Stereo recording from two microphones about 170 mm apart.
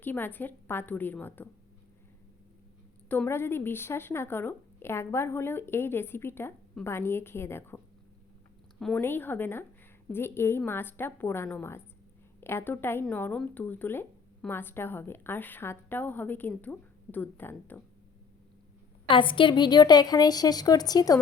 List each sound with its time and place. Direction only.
0.0 s speech: 10° left (ahead or behind)
3.1 s speech: 10° left (ahead or behind)
9.0 s speech: 10° left (ahead or behind)
19.0 s a woman's voice: 30° left (ahead or behind)